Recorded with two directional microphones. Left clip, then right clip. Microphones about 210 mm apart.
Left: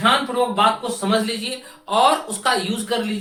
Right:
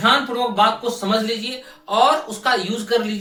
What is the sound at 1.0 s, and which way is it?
Speech, 15° left (ahead or behind).